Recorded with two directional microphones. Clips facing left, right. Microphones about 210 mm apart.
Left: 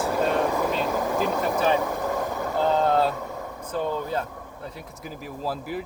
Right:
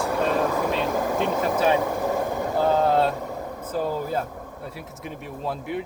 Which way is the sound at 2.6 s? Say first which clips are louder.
Right 1 dB; 5° right (ahead or behind).